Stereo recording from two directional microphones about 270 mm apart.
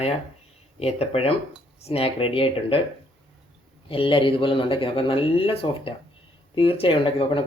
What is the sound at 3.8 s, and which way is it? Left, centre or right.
Speech, centre.